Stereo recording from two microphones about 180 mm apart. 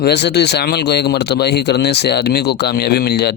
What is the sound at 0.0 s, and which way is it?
Speech, 70° left (ahead or behind).